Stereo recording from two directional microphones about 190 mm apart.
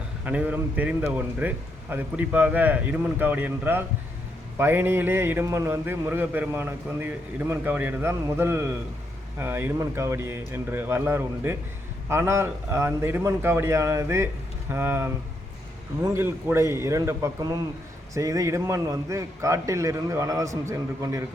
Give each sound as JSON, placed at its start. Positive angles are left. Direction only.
{"t": 0.3, "sound": "speech", "side_deg": -10}
{"t": 16.1, "sound": "speech", "side_deg": -15}